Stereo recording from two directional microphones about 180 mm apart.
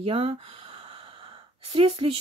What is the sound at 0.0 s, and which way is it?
Speech, 30° right (ahead or behind).